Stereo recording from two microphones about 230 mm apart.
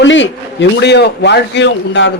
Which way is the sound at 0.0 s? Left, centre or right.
Left.